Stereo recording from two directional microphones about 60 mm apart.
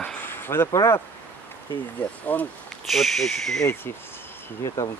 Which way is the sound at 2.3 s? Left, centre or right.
Left.